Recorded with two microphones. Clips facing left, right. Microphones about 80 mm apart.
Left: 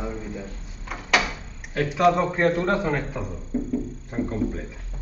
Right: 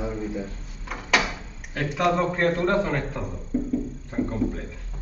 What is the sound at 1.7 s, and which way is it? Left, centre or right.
A man's voice, centre.